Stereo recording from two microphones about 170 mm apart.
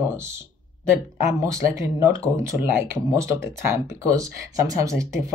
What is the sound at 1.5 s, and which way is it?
Speech, 20° right (ahead or behind).